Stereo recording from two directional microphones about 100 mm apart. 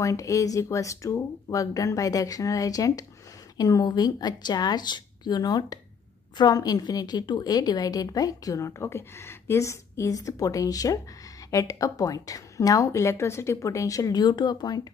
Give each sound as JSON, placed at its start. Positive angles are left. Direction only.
{"t": 0.0, "sound": "a woman's voice", "side_deg": 30}